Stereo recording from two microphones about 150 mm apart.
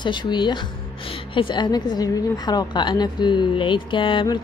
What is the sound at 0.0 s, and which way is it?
A woman's voice, 30° left (ahead or behind).